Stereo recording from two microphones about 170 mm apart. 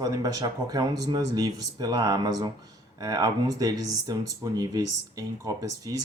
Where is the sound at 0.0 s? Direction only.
20° right (ahead or behind).